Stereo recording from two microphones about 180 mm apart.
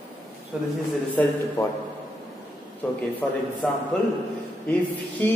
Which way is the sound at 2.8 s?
10° left (ahead or behind).